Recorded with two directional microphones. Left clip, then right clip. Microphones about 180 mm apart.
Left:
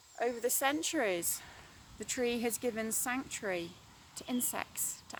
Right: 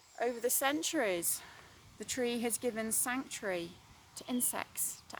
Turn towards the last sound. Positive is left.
turn(degrees=-10)  # may be behind; listen again after turning